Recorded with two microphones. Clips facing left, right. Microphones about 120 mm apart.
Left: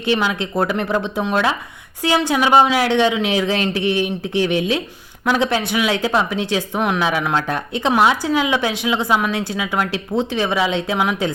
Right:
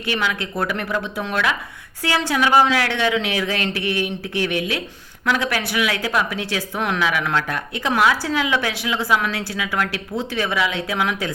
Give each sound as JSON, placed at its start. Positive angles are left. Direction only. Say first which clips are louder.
{"t": 0.1, "sound": "a woman's voice", "louder": "left 5 dB", "side_deg": 25}